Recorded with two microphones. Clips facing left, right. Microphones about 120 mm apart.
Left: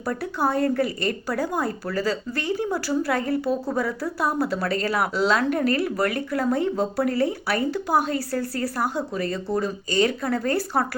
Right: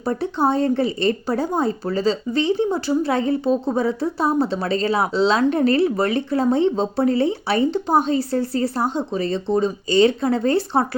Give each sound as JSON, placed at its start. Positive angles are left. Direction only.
{"t": 0.0, "sound": "speech", "side_deg": -25}